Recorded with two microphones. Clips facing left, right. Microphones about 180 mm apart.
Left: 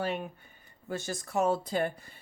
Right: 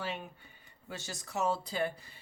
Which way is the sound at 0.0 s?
50° left (ahead or behind).